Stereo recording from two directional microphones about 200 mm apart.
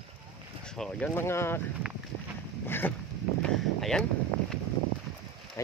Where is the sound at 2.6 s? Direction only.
10° left (ahead or behind).